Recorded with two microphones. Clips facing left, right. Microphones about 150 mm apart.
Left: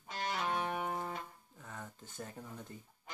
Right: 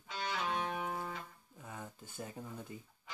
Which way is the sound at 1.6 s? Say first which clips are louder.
Right 1 dB; 10° right (ahead or behind).